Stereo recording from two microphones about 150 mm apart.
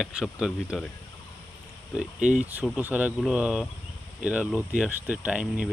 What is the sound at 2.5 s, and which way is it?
Speech, 10° right (ahead or behind).